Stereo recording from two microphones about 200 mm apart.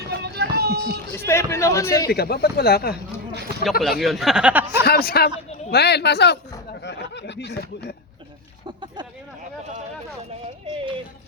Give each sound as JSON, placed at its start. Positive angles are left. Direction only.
{"t": 0.1, "sound": "a sound", "side_deg": -55}
{"t": 1.1, "sound": "a man's voice", "side_deg": 10}
{"t": 2.0, "sound": "speech", "side_deg": 50}
{"t": 3.6, "sound": "speech", "side_deg": 0}
{"t": 4.9, "sound": "speech", "side_deg": 50}
{"t": 10.7, "sound": "a sound", "side_deg": -25}